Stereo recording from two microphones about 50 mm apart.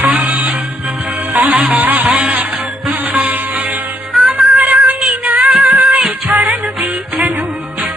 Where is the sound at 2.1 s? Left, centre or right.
Right.